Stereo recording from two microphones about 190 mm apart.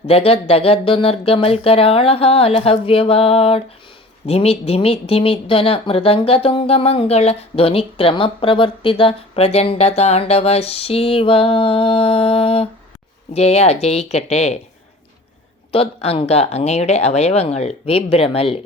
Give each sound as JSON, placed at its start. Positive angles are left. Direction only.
{"t": 0.1, "sound": "speech", "side_deg": 30}
{"t": 15.7, "sound": "speech", "side_deg": 30}